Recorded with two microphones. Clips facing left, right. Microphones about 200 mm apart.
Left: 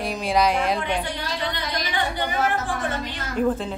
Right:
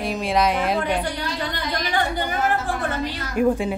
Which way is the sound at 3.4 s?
10° right (ahead or behind).